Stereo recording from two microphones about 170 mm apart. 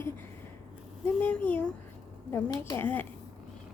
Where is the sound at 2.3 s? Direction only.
20° left (ahead or behind).